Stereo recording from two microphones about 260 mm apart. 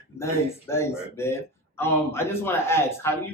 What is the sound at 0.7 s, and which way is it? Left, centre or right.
A man's voice, centre.